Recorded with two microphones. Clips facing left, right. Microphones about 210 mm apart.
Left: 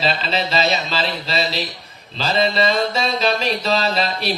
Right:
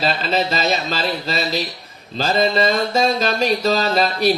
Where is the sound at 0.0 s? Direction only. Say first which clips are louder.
Right 2 dB; 45° right (ahead or behind).